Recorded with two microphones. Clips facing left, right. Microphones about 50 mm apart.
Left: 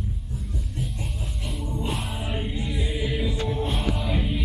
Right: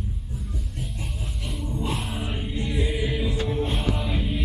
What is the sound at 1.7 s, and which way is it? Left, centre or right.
Music, centre.